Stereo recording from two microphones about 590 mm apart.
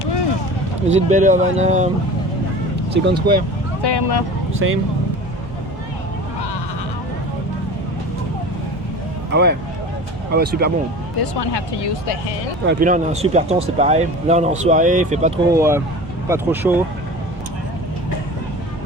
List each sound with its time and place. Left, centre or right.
0.9 s speech: centre
2.9 s speech: centre
3.8 s speech: left
4.5 s speech: centre
9.3 s speech: centre
11.2 s speech: left
12.6 s speech: centre